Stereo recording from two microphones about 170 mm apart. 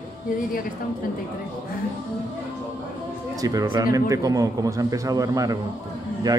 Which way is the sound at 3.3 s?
20° right (ahead or behind).